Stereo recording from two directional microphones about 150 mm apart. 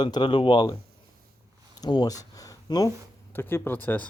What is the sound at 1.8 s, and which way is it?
Speech, 25° left (ahead or behind).